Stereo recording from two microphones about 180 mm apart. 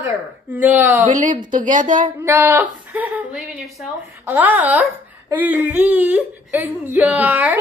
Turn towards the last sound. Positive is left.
turn(degrees=-10)  # may be behind; listen again after turning